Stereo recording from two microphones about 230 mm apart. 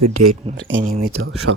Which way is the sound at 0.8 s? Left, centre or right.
Right.